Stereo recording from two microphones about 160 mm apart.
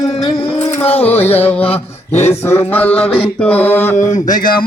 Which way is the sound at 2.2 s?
15° left (ahead or behind).